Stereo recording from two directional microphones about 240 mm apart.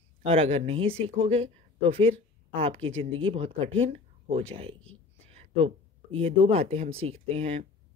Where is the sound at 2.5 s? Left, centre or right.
Right.